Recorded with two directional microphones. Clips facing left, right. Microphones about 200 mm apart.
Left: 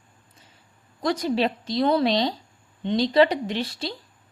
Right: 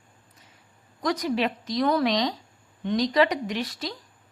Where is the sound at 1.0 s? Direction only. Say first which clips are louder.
Left 2 dB; 30° left (ahead or behind).